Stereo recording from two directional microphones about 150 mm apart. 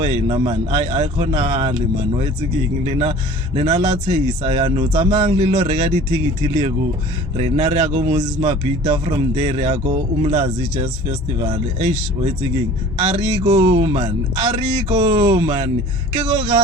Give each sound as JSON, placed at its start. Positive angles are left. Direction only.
{"t": 0.0, "sound": "speech", "side_deg": -35}
{"t": 13.4, "sound": "speech", "side_deg": -25}
{"t": 13.7, "sound": "speech", "side_deg": -40}